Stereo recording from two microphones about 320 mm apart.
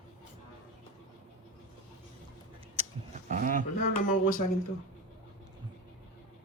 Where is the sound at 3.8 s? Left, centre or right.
Left.